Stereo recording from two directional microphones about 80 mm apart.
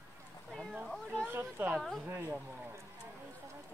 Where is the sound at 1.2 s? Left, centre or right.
Right.